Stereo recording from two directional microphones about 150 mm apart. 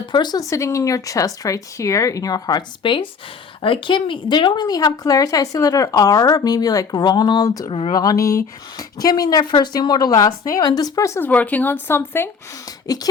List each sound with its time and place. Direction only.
0.0 s speech: 30° left (ahead or behind)
7.7 s speech: 40° left (ahead or behind)
7.9 s speech: 25° left (ahead or behind)
12.9 s speech: 25° left (ahead or behind)